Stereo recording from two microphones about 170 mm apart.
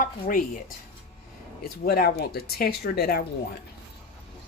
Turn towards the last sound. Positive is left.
turn(degrees=65)  # may be behind; listen again after turning